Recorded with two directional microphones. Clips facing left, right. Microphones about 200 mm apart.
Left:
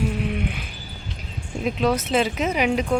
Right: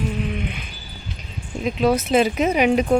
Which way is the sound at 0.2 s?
5° left (ahead or behind).